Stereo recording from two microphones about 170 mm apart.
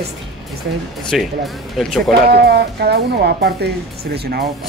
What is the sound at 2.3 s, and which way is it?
Speech, 70° right (ahead or behind).